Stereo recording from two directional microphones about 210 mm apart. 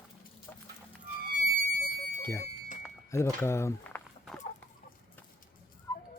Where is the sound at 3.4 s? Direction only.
10° left (ahead or behind).